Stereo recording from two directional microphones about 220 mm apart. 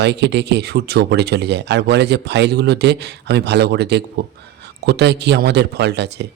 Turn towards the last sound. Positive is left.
turn(degrees=-50)  # may be behind; listen again after turning